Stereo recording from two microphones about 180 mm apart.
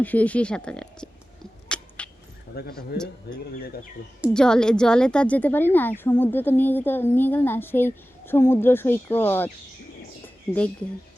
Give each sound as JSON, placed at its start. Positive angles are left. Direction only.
{"t": 0.0, "sound": "speech", "side_deg": 10}
{"t": 1.6, "sound": "a sound", "side_deg": 5}
{"t": 2.5, "sound": "speech", "side_deg": 60}
{"t": 4.4, "sound": "a woman's voice", "side_deg": 5}